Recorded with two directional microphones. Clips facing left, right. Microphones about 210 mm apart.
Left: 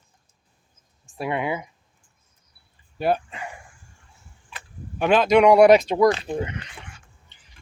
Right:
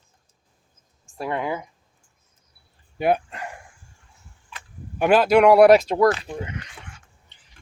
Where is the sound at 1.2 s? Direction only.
5° left (ahead or behind).